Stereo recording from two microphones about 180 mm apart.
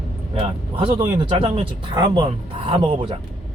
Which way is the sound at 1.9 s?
25° right (ahead or behind).